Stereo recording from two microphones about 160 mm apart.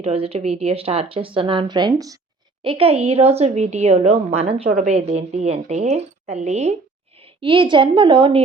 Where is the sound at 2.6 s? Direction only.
35° right (ahead or behind).